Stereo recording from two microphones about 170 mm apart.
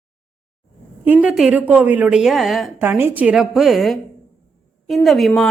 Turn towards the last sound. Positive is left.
turn(degrees=0)  # may be behind; listen again after turning